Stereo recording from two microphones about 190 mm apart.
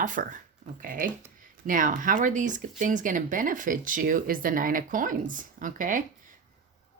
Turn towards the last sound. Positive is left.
turn(degrees=-45)  # may be behind; listen again after turning